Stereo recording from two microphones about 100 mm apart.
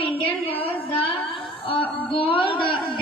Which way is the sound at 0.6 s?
65° left (ahead or behind).